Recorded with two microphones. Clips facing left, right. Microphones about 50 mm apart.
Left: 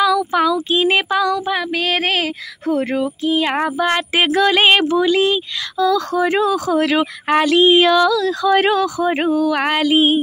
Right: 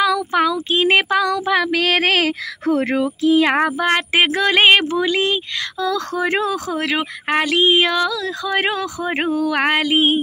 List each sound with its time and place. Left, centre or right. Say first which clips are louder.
0.0 s child singing: left 2 dB; right
3.6 s speech: even; right
6.8 s speech: left 5 dB; right
9.4 s speech: left 1 dB; right